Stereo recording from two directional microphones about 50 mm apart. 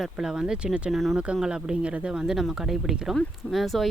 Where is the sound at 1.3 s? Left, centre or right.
Centre.